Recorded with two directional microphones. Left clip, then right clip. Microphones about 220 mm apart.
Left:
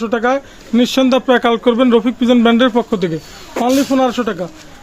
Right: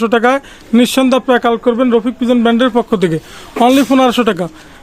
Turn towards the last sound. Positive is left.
turn(degrees=-40)  # may be behind; listen again after turning